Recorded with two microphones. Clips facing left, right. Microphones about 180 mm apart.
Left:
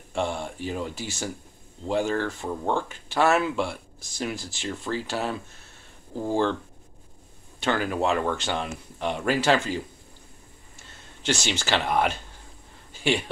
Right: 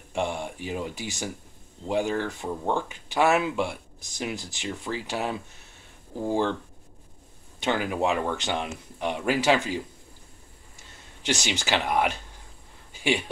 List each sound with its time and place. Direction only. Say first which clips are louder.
0.1 s speech: left 1 dB; 15° right (ahead or behind)
7.6 s speech: left 1 dB; 15° right (ahead or behind)
11.2 s speech: left 1 dB; 15° right (ahead or behind)
12.9 s a sound: left 1 dB; 15° right (ahead or behind)